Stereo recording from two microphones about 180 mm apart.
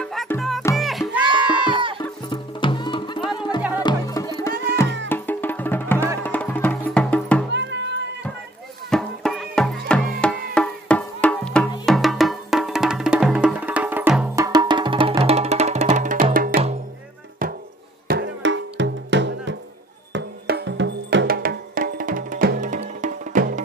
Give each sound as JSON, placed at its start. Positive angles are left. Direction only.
{"t": 0.0, "sound": "music", "side_deg": 0}
{"t": 2.2, "sound": "music", "side_deg": 25}
{"t": 4.8, "sound": "music", "side_deg": -90}
{"t": 5.1, "sound": "music", "side_deg": 10}
{"t": 7.5, "sound": "music", "side_deg": -80}
{"t": 8.9, "sound": "music", "side_deg": 0}
{"t": 18.0, "sound": "music", "side_deg": -70}
{"t": 21.3, "sound": "music", "side_deg": -55}